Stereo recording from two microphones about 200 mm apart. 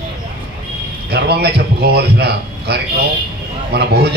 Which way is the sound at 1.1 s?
55° right (ahead or behind).